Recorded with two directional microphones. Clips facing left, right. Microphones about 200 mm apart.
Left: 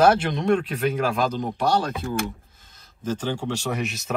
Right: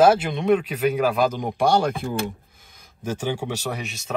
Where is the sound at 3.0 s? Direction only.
10° right (ahead or behind).